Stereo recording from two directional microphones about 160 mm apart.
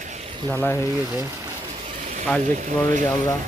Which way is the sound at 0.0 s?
45° right (ahead or behind).